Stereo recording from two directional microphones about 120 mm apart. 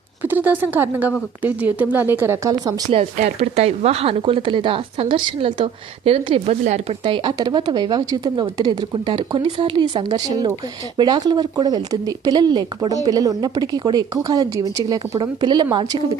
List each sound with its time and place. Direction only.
0.2 s a woman's voice: 15° right (ahead or behind)
2.9 s speech: 65° right (ahead or behind); by 8.7 s 35° right (ahead or behind)
9.0 s speech: 45° right (ahead or behind)